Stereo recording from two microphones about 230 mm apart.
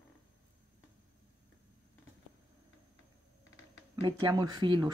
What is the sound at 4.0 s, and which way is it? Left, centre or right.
Speech, centre.